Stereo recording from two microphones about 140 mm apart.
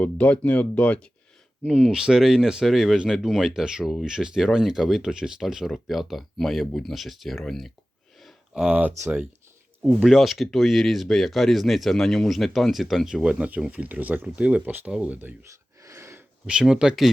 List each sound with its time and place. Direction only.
0.0 s speech: 10° left (ahead or behind)
1.6 s speech: 5° right (ahead or behind)
9.8 s speech: centre (ahead or behind)
15.8 s a sound: 20° right (ahead or behind)
16.5 s speech: 5° right (ahead or behind)